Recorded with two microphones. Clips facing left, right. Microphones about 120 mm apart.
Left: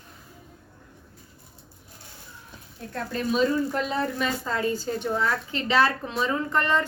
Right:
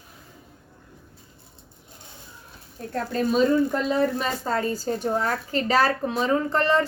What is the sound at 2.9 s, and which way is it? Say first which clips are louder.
A woman's voice: right 4 dB; 40° right (ahead or behind).